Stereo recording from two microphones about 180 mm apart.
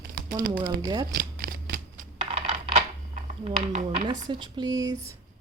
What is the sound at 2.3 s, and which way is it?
Coin, 35° right (ahead or behind).